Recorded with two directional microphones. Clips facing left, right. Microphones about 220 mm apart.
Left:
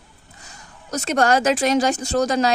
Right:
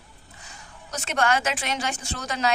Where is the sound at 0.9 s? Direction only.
40° left (ahead or behind).